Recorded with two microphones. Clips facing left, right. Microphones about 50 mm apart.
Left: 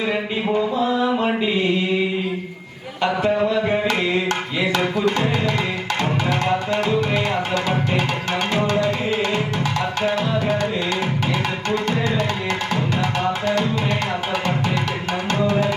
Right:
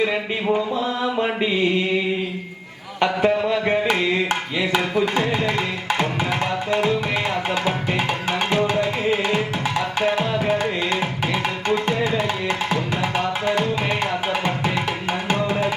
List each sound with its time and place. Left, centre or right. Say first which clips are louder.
3.0 s a sound: even; right
4.9 s music: even; centre
11.7 s music: right 1 dB; centre